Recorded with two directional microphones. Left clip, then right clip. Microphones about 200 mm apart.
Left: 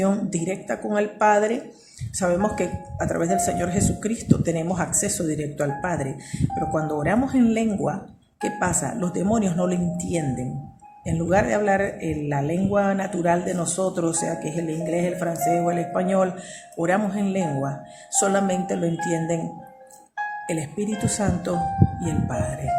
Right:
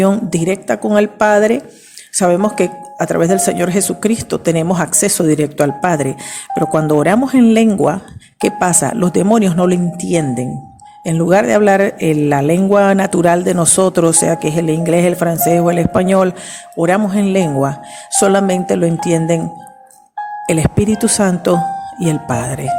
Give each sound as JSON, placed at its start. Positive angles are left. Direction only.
{"t": 0.0, "sound": "speech", "side_deg": -45}
{"t": 20.5, "sound": "speech", "side_deg": -45}